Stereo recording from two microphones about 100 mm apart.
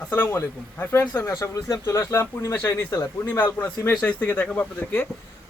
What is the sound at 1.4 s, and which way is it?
A man's voice, 35° left (ahead or behind).